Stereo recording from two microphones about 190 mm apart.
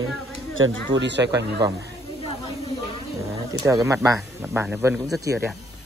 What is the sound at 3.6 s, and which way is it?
Speech, 15° right (ahead or behind).